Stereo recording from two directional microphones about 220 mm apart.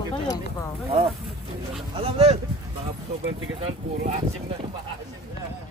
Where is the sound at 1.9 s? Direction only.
25° right (ahead or behind).